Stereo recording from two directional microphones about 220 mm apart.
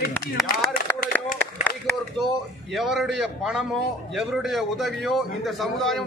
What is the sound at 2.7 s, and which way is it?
A man's voice, centre (ahead or behind).